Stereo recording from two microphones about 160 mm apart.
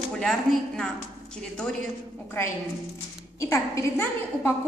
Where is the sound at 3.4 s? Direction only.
20° left (ahead or behind).